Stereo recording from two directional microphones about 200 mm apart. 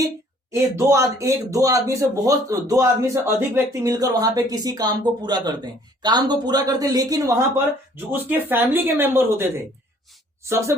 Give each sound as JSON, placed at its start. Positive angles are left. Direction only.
{"t": 0.5, "sound": "a man's voice", "side_deg": -15}